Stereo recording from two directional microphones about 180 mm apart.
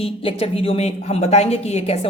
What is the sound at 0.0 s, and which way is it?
A woman's voice, 30° left (ahead or behind).